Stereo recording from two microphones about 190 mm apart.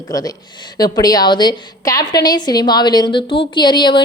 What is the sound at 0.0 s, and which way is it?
Speech, 20° left (ahead or behind).